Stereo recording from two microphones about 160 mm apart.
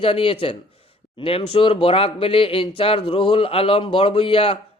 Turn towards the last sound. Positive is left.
turn(degrees=35)  # may be behind; listen again after turning